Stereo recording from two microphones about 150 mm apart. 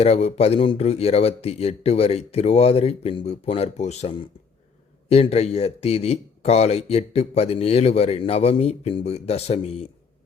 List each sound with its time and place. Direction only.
0.0 s speech: 45° left (ahead or behind)